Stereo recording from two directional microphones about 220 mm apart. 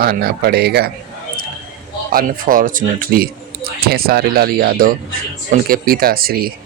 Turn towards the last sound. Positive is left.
turn(degrees=-45)  # may be behind; listen again after turning